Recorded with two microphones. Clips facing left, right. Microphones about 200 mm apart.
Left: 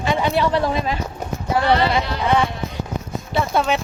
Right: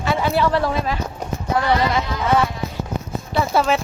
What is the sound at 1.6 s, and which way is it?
Sheep, 70° left (ahead or behind).